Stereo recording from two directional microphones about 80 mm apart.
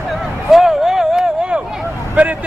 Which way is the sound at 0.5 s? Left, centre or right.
Centre.